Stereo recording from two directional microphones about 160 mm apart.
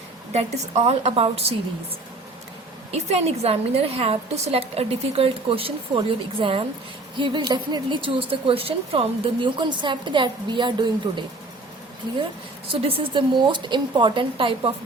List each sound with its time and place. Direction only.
0.3 s a woman's voice: 40° right (ahead or behind)
2.9 s a woman's voice: 40° right (ahead or behind)
12.7 s a woman's voice: 35° right (ahead or behind)